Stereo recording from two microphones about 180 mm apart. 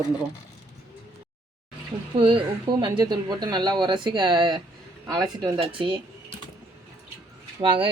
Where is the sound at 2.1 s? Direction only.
30° right (ahead or behind).